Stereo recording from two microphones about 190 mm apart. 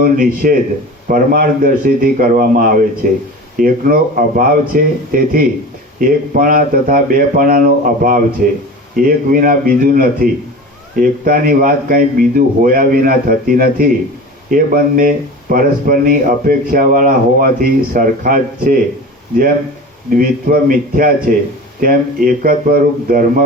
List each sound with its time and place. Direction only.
0.0 s speech: 50° right (ahead or behind)
20.1 s speech: 45° right (ahead or behind)